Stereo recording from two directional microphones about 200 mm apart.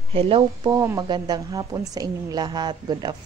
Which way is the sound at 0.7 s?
15° right (ahead or behind).